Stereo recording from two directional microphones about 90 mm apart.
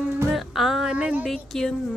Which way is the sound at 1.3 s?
5° left (ahead or behind).